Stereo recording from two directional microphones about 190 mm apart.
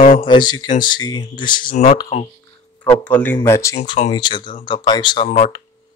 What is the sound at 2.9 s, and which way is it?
Speech, 10° left (ahead or behind).